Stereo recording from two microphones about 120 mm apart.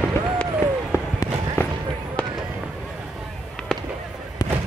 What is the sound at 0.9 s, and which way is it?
Run, 25° left (ahead or behind).